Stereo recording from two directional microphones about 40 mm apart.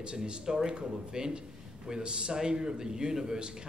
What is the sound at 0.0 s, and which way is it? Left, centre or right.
A man's voice, right.